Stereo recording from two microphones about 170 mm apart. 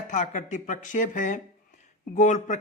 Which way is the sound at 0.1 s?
50° left (ahead or behind).